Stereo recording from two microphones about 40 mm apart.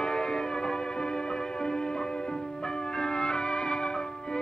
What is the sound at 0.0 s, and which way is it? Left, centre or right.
Music, left.